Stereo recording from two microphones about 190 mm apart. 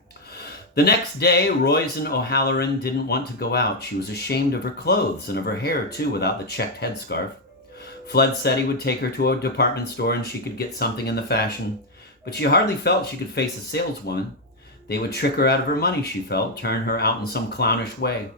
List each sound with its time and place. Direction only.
0.8 s speech: 55° left (ahead or behind)